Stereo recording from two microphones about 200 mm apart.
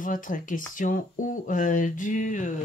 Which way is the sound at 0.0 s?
40° left (ahead or behind).